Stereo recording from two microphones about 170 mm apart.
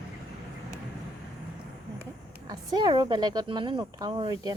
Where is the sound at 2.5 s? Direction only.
25° right (ahead or behind).